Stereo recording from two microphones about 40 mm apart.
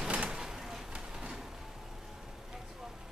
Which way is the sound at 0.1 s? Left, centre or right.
Right.